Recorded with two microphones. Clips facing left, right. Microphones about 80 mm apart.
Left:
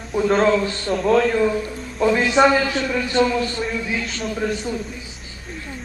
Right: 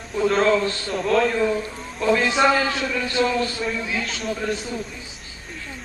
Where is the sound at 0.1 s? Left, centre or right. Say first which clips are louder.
Left 2 dB; centre.